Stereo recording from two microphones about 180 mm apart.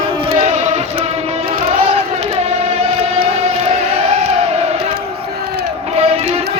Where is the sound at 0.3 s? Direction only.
35° right (ahead or behind).